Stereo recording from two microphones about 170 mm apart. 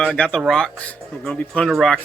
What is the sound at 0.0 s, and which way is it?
Speech, 5° left (ahead or behind).